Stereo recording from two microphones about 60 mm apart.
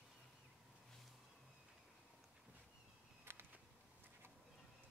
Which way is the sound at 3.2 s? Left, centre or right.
Right.